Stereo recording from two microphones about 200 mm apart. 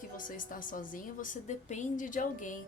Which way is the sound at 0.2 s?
40° left (ahead or behind).